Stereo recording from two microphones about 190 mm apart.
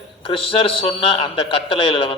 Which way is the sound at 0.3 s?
30° left (ahead or behind).